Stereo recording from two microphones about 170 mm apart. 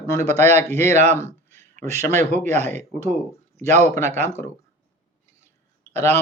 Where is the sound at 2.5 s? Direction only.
40° right (ahead or behind).